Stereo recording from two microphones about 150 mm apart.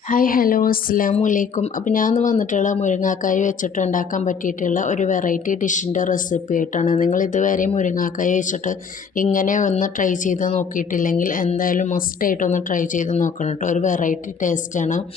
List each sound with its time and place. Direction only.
0.1 s a woman's voice: 65° left (ahead or behind)